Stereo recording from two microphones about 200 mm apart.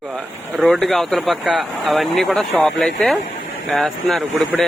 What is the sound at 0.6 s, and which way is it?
Speech, centre (ahead or behind).